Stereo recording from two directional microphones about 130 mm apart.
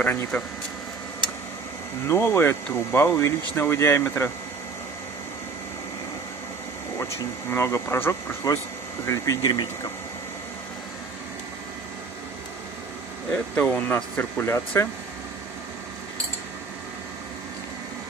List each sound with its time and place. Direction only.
0.0 s speech: 15° left (ahead or behind)
2.0 s speech: 20° left (ahead or behind)
7.5 s speech: 20° left (ahead or behind)
13.6 s speech: 10° left (ahead or behind)